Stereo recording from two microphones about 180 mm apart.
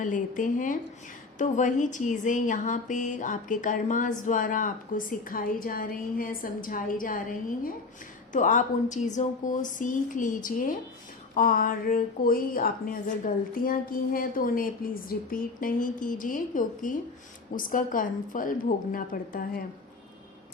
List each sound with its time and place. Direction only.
0.0 s speech: 45° left (ahead or behind)